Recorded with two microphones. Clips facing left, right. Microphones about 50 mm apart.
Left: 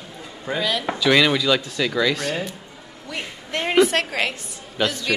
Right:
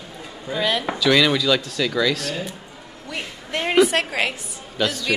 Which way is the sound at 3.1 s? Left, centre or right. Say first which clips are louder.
Even; centre.